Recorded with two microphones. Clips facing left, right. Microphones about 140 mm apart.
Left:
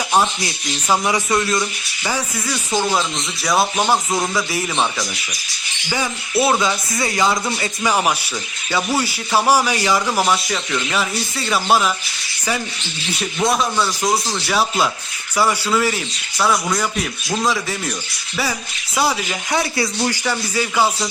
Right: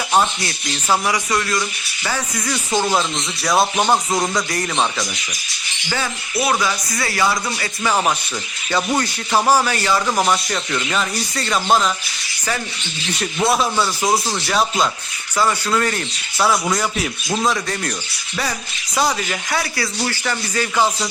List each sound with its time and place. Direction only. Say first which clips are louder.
0.1 s speech: even; 10° left (ahead or behind)
2.5 s a man's voice: right 1 dB; centre (ahead or behind)
6.5 s speech: left 2 dB; 20° left (ahead or behind)
8.7 s a man's voice: even; 5° left (ahead or behind)
13.1 s a man's voice: right 1 dB; centre (ahead or behind)
18.9 s speech: even; 5° left (ahead or behind)
19.5 s speech: left 5 dB; 20° left (ahead or behind)